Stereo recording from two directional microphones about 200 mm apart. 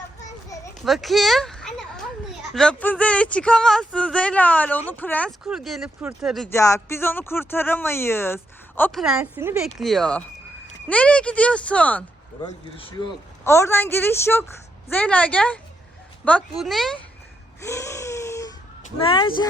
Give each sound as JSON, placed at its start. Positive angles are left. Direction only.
{"t": 0.8, "sound": "a sound", "side_deg": 0}
{"t": 2.6, "sound": "speech", "side_deg": 5}
{"t": 5.5, "sound": "speech", "side_deg": 0}
{"t": 6.5, "sound": "speech", "side_deg": 15}
{"t": 9.8, "sound": "speech", "side_deg": 0}
{"t": 13.4, "sound": "speech", "side_deg": 10}
{"t": 17.6, "sound": "wail", "side_deg": 15}
{"t": 19.0, "sound": "speech", "side_deg": 25}